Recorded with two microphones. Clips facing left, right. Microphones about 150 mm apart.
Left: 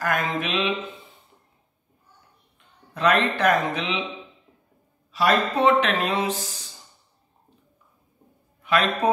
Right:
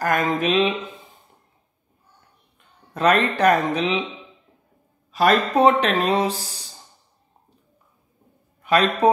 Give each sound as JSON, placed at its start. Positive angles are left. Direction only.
{"t": 0.0, "sound": "speech", "side_deg": -40}
{"t": 2.9, "sound": "speech", "side_deg": -40}
{"t": 5.1, "sound": "speech", "side_deg": -45}
{"t": 8.6, "sound": "speech", "side_deg": -40}